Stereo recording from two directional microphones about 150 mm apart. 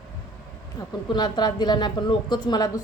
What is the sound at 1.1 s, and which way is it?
A woman's voice, 30° left (ahead or behind).